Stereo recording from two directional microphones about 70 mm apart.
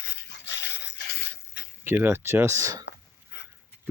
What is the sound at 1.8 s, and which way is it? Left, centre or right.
Speech, right.